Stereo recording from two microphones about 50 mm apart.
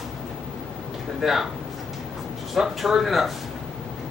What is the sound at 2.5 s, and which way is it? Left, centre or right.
Speech, centre.